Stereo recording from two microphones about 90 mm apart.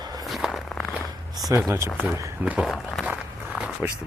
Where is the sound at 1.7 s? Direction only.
30° right (ahead or behind).